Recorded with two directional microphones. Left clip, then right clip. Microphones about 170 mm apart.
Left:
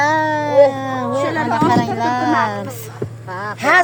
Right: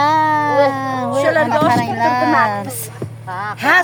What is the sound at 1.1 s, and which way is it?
Speech, 90° right.